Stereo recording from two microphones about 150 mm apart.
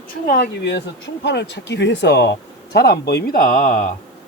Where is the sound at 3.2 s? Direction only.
70° left (ahead or behind).